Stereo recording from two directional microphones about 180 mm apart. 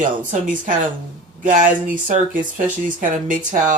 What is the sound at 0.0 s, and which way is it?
Speech, 45° right (ahead or behind).